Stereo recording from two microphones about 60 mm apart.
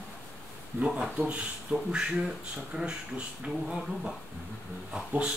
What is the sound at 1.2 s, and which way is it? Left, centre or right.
Speech, centre.